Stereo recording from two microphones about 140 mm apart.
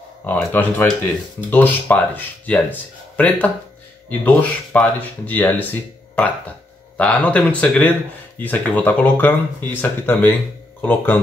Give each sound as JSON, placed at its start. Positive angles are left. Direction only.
{"t": 0.5, "sound": "speech", "side_deg": 15}